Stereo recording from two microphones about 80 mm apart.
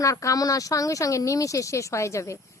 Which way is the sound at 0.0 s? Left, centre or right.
Left.